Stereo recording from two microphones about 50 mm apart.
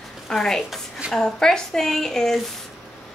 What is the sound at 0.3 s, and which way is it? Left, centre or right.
Speech, centre.